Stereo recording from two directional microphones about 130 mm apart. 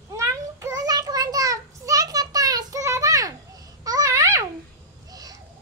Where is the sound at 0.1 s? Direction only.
20° right (ahead or behind).